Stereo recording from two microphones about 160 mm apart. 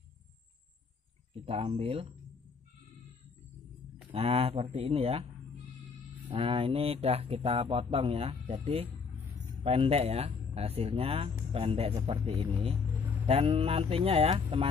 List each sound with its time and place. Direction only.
1.4 s speech: 35° right (ahead or behind)
4.1 s speech: 40° right (ahead or behind)
6.2 s speech: 35° right (ahead or behind)